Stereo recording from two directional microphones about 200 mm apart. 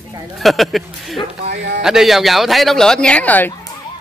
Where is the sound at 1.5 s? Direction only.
55° right (ahead or behind).